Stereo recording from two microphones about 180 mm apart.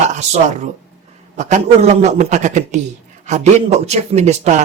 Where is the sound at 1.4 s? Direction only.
40° right (ahead or behind).